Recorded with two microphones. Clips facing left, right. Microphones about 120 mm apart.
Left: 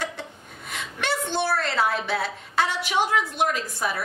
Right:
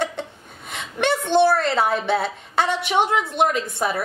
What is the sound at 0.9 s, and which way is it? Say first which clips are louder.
A woman's voice: right 9 dB; 20° right (ahead or behind).